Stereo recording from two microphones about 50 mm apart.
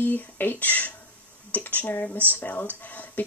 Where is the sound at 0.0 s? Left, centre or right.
Left.